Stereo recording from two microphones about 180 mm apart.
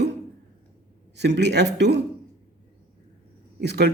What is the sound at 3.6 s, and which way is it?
Speech, 70° right (ahead or behind).